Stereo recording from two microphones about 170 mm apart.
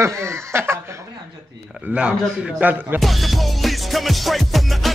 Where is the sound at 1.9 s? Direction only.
5° right (ahead or behind).